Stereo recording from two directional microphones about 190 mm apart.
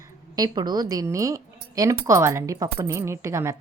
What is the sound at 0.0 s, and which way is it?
A woman's voice, 20° right (ahead or behind).